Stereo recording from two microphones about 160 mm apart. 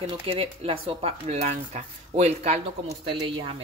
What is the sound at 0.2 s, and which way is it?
Speech, 40° right (ahead or behind).